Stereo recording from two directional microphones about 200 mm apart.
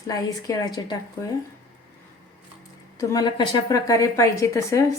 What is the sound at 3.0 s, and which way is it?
A woman's voice, 20° left (ahead or behind).